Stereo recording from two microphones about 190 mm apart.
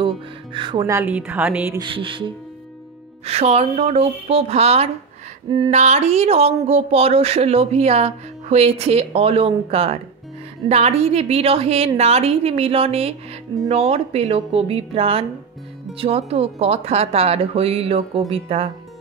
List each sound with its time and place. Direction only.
0.5 s a woman's voice: 25° right (ahead or behind); by 1.8 s 10° right (ahead or behind)
1.8 s music: 25° right (ahead or behind)
3.3 s speech: 35° right (ahead or behind)